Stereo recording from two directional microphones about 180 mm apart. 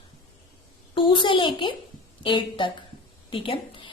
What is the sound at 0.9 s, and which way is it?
A woman's voice, 25° left (ahead or behind).